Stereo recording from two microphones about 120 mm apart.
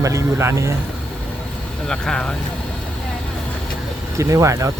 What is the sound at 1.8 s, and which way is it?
Speech, 5° left (ahead or behind).